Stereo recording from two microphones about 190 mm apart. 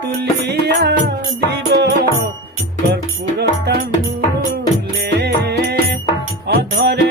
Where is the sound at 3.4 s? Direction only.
60° right (ahead or behind).